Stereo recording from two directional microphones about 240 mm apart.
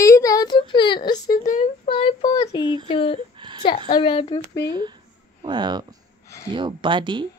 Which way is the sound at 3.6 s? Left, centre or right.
Left.